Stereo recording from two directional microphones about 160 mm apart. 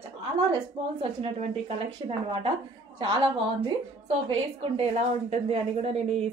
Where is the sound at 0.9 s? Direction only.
40° right (ahead or behind).